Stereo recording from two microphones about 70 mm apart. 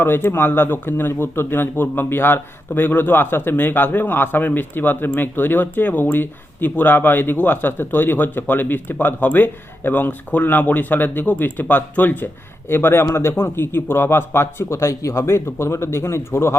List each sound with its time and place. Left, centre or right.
0.0 s speech: left